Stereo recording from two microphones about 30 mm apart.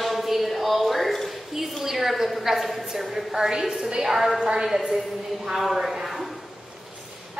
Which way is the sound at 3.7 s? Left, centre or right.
Right.